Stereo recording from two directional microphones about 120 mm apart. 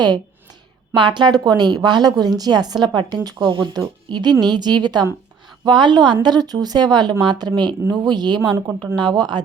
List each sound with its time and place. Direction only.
0.9 s a woman's voice: 40° right (ahead or behind)